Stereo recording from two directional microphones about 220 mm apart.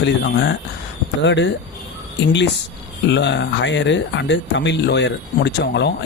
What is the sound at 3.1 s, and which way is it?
Speech, 55° left (ahead or behind).